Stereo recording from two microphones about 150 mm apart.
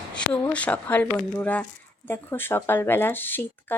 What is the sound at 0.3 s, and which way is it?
Speech, 10° left (ahead or behind).